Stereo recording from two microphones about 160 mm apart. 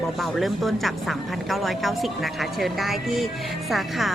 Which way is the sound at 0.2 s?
Centre (ahead or behind).